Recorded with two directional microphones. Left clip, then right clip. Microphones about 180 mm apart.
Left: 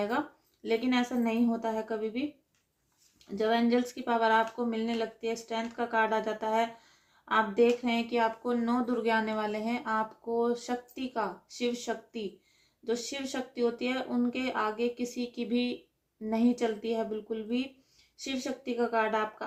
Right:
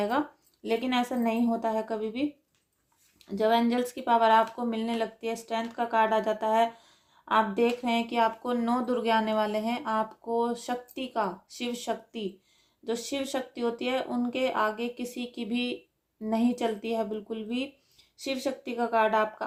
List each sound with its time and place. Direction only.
0.6 s speech: 35° right (ahead or behind)
3.3 s speech: 35° right (ahead or behind)